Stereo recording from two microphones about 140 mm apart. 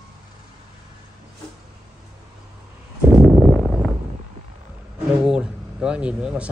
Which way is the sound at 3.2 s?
Centre (ahead or behind).